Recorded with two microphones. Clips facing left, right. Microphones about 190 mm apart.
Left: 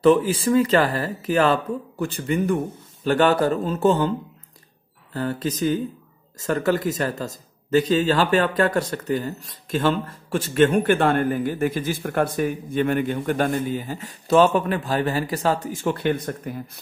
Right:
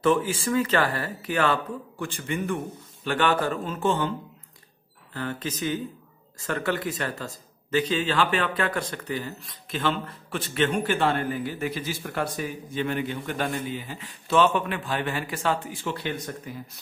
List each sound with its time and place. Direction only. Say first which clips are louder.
0.0 s speech: left 6 dB; 35° left (ahead or behind)
5.1 s a man's voice: left 6 dB; 40° left (ahead or behind); by 16.8 s 55° left (ahead or behind)